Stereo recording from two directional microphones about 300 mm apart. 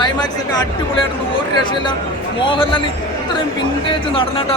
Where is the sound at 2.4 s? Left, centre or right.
Centre.